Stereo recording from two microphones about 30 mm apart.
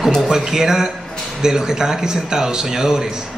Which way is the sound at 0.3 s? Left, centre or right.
Centre.